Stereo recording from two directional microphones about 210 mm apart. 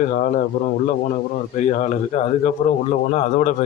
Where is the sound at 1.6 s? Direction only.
35° left (ahead or behind).